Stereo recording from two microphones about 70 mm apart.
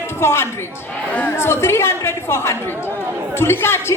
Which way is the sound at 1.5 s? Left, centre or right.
Left.